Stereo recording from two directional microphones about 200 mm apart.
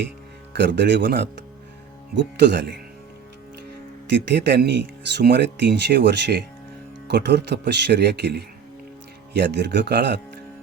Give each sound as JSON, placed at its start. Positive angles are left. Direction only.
{"t": 0.5, "sound": "speech", "side_deg": -60}
{"t": 4.1, "sound": "speech", "side_deg": -60}